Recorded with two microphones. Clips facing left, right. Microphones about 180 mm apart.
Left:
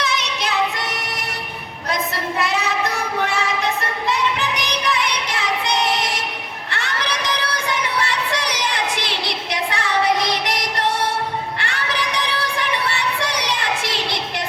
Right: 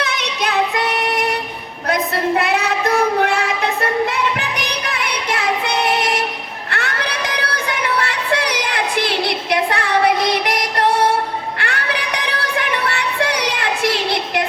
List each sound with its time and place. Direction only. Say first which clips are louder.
0.0 s female singing: right 2 dB; 60° right (ahead or behind)
6.7 s music: right 2 dB; 55° right (ahead or behind)